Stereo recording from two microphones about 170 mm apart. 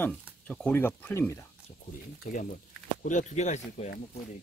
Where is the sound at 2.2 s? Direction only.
50° left (ahead or behind).